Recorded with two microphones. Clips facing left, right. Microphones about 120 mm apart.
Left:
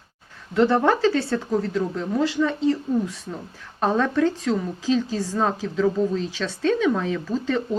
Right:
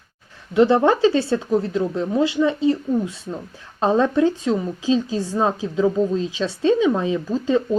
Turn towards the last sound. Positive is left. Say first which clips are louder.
# right 4 dB
turn(degrees=-15)  # may be behind; listen again after turning